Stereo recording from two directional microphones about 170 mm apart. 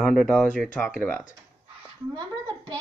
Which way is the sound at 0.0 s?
Centre (ahead or behind).